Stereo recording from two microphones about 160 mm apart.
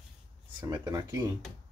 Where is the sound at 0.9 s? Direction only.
20° right (ahead or behind).